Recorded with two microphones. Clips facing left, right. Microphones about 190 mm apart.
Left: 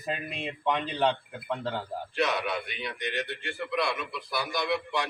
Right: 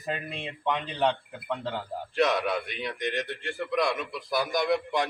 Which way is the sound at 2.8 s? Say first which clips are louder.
Right 3 dB; 45° right (ahead or behind).